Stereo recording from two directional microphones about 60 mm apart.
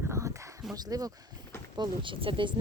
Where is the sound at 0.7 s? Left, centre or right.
Right.